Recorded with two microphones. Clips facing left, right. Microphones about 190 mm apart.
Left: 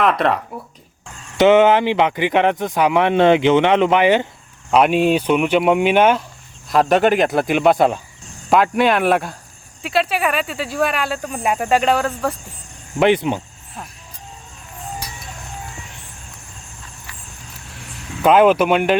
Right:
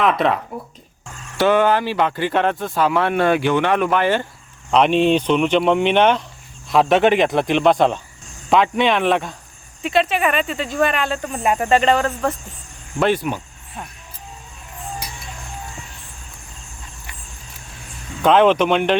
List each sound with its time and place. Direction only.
0.0 s speech: centre (ahead or behind)
1.4 s speech: 20° left (ahead or behind)
4.7 s speech: 5° left (ahead or behind)
13.0 s speech: 20° left (ahead or behind)
18.2 s speech: 5° left (ahead or behind)